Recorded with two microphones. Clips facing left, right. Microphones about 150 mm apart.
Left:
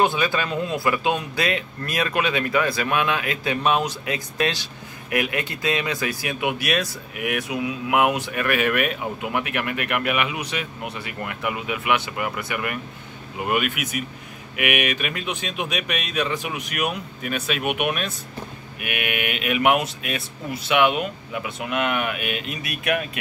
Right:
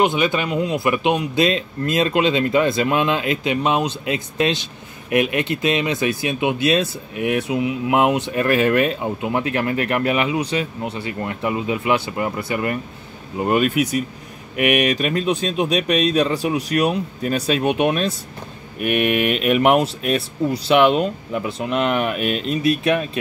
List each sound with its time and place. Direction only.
0.0 s speech: 20° right (ahead or behind)